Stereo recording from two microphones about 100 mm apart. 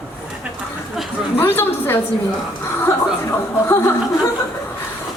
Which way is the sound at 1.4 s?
20° left (ahead or behind).